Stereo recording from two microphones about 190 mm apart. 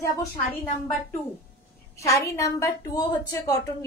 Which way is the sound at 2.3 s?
15° left (ahead or behind).